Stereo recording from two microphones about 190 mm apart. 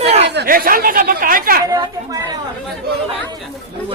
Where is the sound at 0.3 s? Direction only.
55° right (ahead or behind).